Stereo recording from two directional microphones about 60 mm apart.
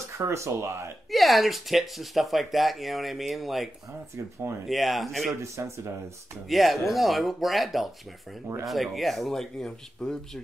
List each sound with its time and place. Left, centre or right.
0.2 s speech: right
1.1 s speech: centre
5.4 s speech: right
6.5 s speech: centre